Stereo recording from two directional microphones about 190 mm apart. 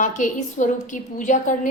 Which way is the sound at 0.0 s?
40° left (ahead or behind).